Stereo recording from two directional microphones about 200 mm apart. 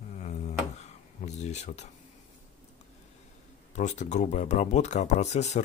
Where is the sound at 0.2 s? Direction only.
35° left (ahead or behind).